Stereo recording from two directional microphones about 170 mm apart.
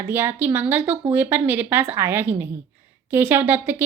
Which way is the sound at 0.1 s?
10° right (ahead or behind).